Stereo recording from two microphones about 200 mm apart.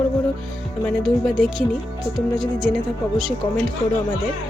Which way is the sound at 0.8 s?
Centre (ahead or behind).